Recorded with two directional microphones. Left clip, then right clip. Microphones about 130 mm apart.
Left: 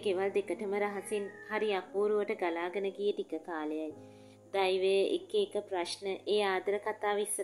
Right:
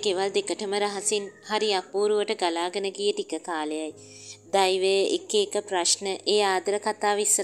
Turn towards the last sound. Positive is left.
turn(degrees=-55)  # may be behind; listen again after turning